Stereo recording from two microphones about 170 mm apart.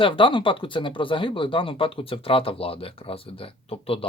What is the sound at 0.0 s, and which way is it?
Speech, 30° left (ahead or behind).